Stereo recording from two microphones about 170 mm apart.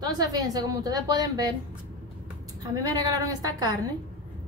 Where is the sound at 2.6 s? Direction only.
20° right (ahead or behind).